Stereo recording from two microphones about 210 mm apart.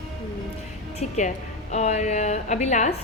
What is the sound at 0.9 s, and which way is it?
A woman's voice, 35° left (ahead or behind).